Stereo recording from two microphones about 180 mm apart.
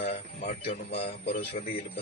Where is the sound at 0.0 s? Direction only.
60° left (ahead or behind).